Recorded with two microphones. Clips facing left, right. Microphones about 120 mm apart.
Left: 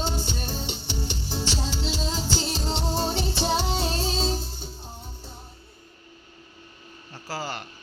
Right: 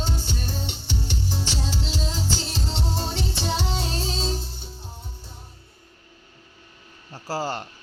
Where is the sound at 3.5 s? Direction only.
40° left (ahead or behind).